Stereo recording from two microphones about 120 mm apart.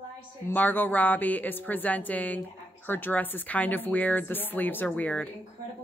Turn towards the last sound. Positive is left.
turn(degrees=10)  # may be behind; listen again after turning